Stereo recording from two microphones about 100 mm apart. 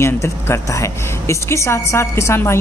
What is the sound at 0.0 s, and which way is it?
A woman's voice, 25° left (ahead or behind).